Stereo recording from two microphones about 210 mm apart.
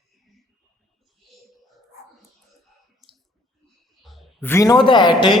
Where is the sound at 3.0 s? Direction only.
Centre (ahead or behind).